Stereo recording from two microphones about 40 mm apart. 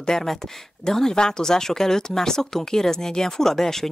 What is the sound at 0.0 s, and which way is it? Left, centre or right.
Speech, centre.